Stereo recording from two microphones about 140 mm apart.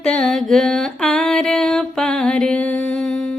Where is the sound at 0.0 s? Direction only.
5° left (ahead or behind).